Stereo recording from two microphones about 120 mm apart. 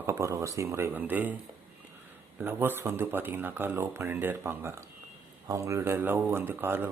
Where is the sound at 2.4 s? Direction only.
15° right (ahead or behind).